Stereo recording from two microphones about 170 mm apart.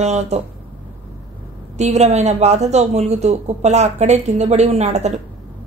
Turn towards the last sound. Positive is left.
turn(degrees=-40)  # may be behind; listen again after turning